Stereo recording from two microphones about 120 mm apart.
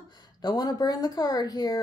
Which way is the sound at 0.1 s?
35° left (ahead or behind).